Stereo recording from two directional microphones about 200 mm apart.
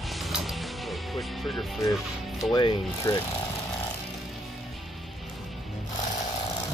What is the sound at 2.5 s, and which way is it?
Speech, 25° left (ahead or behind).